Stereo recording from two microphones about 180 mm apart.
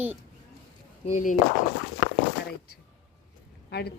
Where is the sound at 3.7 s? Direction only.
65° left (ahead or behind).